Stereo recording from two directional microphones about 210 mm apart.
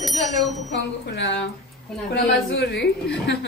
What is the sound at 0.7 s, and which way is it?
A woman's voice, 55° left (ahead or behind).